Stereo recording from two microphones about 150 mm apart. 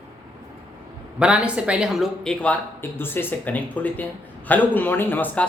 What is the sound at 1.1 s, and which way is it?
Speech, 5° right (ahead or behind).